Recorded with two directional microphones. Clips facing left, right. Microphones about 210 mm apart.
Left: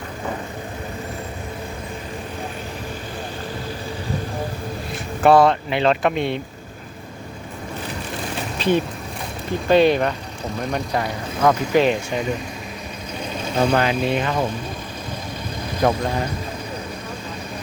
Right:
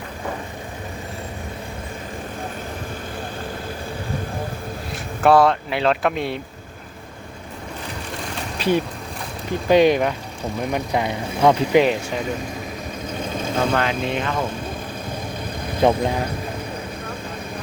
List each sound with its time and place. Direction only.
5.2 s speech: centre (ahead or behind)
8.5 s boat: 10° right (ahead or behind)
9.6 s speech: 15° right (ahead or behind)
13.6 s speech: 15° left (ahead or behind)
15.8 s speech: 25° right (ahead or behind)